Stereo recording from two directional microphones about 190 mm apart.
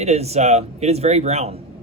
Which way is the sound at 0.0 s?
35° right (ahead or behind).